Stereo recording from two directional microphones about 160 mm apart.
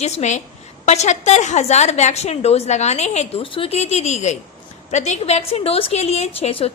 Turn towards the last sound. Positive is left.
turn(degrees=35)  # may be behind; listen again after turning